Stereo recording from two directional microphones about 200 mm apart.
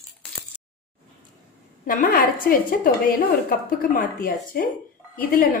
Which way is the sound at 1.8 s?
45° left (ahead or behind).